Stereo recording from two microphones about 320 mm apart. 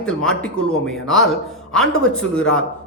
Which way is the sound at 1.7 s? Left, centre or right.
Centre.